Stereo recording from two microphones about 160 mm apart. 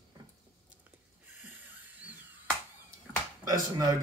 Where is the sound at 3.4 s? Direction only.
20° right (ahead or behind).